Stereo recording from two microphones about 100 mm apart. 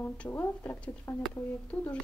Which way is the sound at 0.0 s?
20° left (ahead or behind).